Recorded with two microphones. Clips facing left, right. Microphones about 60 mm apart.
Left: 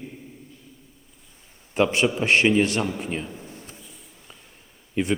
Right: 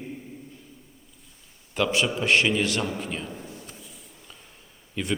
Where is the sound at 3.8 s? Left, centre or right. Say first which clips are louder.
Even; centre.